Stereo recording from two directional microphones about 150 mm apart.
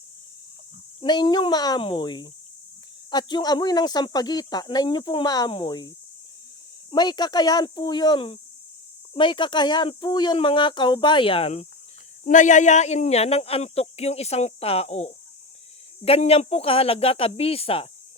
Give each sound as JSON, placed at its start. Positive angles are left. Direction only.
{"t": 1.0, "sound": "speech", "side_deg": 30}
{"t": 6.9, "sound": "speech", "side_deg": 30}
{"t": 12.2, "sound": "speech", "side_deg": 55}